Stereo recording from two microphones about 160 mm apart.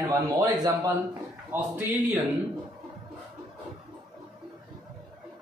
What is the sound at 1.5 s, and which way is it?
Speech, 10° right (ahead or behind).